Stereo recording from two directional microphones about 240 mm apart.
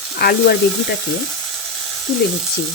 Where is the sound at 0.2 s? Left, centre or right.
Left.